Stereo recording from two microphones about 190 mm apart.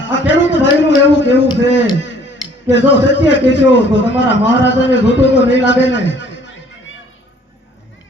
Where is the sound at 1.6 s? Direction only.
70° left (ahead or behind).